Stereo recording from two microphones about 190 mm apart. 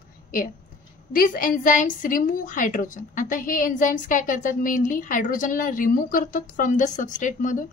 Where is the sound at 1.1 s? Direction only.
45° left (ahead or behind).